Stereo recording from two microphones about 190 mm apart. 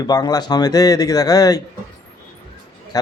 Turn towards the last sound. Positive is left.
turn(degrees=20)  # may be behind; listen again after turning